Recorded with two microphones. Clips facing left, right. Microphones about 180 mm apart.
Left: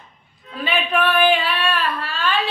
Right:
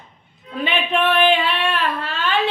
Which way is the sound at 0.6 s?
20° right (ahead or behind).